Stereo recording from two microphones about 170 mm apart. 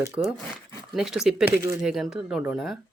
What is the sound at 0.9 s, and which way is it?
Speech, 5° right (ahead or behind).